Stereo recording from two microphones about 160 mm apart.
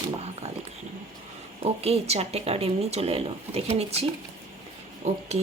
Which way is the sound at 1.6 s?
40° right (ahead or behind).